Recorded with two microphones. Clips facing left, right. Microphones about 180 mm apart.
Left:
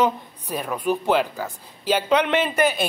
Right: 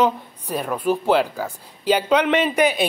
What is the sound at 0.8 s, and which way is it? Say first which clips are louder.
Speech: right 2 dB; 10° right (ahead or behind).